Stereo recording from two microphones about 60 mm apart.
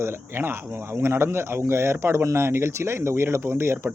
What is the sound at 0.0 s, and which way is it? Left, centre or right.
Speech, right.